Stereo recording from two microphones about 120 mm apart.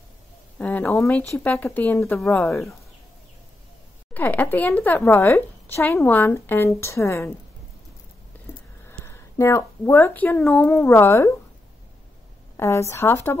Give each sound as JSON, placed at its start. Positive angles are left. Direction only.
{"t": 0.6, "sound": "a sound", "side_deg": 15}
{"t": 1.1, "sound": "speech", "side_deg": 15}
{"t": 4.1, "sound": "speech", "side_deg": 15}
{"t": 9.0, "sound": "speech", "side_deg": 20}
{"t": 10.7, "sound": "speech", "side_deg": 20}
{"t": 12.5, "sound": "speech", "side_deg": 20}